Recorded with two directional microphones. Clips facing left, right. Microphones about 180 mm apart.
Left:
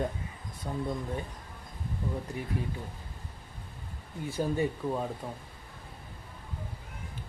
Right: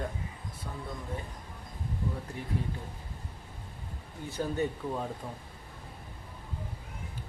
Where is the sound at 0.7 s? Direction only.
35° left (ahead or behind).